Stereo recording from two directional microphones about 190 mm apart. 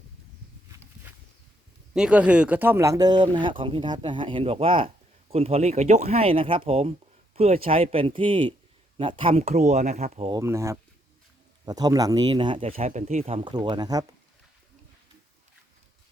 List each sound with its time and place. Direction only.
1.9 s speech: 5° right (ahead or behind); by 10.4 s 30° right (ahead or behind)
10.4 s speech: 15° right (ahead or behind)